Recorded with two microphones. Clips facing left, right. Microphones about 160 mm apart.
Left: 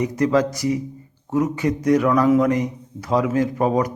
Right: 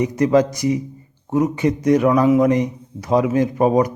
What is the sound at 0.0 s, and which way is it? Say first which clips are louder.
A man's voice: right 3 dB; 20° right (ahead or behind).